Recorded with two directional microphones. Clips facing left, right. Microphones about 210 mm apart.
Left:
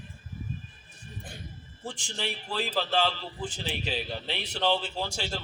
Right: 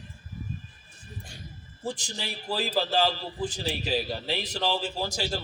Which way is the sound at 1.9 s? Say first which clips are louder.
Right 1 dB; 40° right (ahead or behind).